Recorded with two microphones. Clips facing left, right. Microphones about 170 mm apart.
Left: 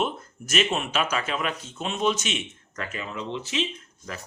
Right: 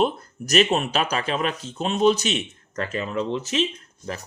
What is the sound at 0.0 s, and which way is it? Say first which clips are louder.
Speech: right 6 dB; 40° right (ahead or behind).